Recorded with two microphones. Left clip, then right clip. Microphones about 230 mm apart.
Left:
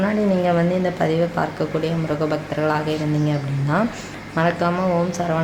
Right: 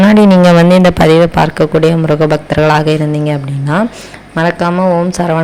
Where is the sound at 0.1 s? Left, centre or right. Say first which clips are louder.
Right 12 dB; right.